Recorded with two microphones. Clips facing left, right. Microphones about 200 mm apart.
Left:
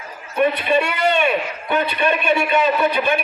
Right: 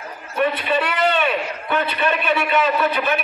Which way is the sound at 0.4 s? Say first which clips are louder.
Left 3 dB; 15° left (ahead or behind).